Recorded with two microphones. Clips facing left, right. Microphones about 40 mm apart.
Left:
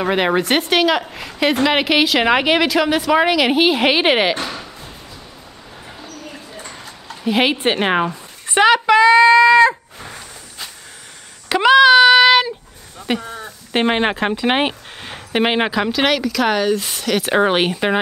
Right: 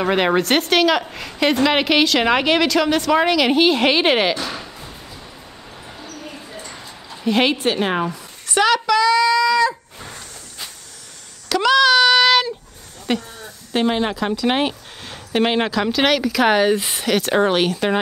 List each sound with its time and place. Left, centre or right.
0.0 s a woman's voice: centre
4.5 s a sound: centre
7.2 s a woman's voice: centre
7.5 s speech: left
9.9 s a sound: centre
13.2 s speech: left
15.9 s speech: centre
16.3 s speech: centre
17.2 s a woman's voice: centre